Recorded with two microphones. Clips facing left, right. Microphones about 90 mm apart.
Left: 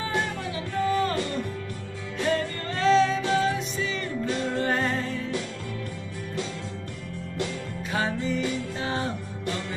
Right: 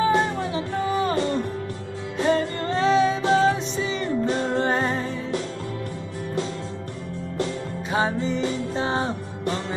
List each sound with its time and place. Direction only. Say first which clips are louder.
0.1 s music: right 7 dB; 25° right (ahead or behind)
3.2 s music: right 5 dB; 30° right (ahead or behind)
7.3 s music: right 4 dB; 25° right (ahead or behind)